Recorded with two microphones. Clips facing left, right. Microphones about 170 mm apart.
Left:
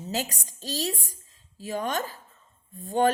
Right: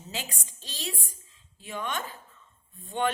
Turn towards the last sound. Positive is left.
turn(degrees=40)  # may be behind; listen again after turning